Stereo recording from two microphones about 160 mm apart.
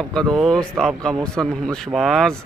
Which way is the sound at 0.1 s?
Centre (ahead or behind).